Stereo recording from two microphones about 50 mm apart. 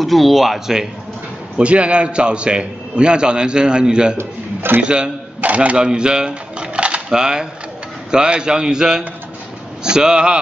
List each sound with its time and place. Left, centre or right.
0.0 s speech: centre
1.6 s a man's voice: right
4.2 s a man's voice: right
4.8 s a man's voice: centre
5.9 s a man's voice: centre